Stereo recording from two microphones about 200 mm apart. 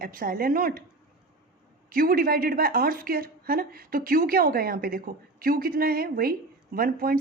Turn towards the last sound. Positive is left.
turn(degrees=-45)  # may be behind; listen again after turning